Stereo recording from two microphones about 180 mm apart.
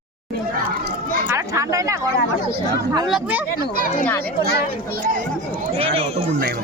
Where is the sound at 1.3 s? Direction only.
15° right (ahead or behind).